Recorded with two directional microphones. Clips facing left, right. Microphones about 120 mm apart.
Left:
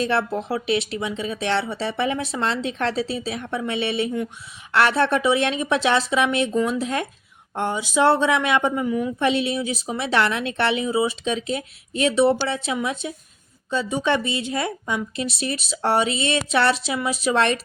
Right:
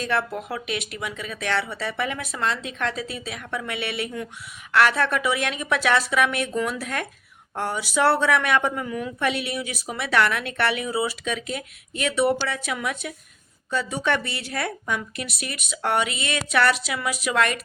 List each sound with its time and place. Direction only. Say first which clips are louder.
0.0 s a woman's voice: left 4 dB; 30° left (ahead or behind)